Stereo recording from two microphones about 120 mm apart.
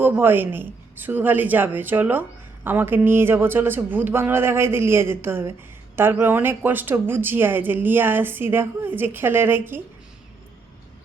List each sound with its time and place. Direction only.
0.0 s a man's voice: 15° right (ahead or behind)